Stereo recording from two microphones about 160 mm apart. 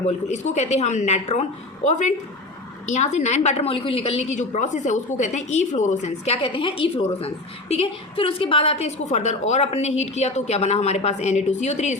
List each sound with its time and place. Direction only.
0.0 s a woman's voice: 45° left (ahead or behind)